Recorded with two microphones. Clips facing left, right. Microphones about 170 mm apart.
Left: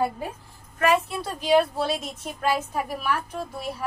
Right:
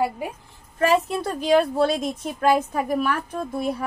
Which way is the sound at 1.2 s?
50° right (ahead or behind).